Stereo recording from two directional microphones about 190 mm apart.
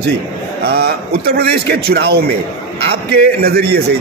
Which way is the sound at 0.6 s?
55° right (ahead or behind).